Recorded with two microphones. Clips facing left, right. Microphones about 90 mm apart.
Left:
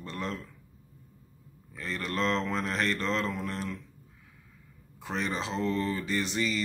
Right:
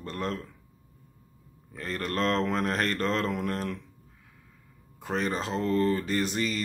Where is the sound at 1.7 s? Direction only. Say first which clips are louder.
Right 2 dB; 45° right (ahead or behind).